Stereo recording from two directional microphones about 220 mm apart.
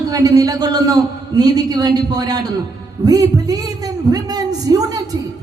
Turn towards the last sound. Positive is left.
turn(degrees=-15)  # may be behind; listen again after turning